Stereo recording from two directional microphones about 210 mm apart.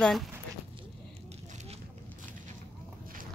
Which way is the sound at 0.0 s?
Centre (ahead or behind).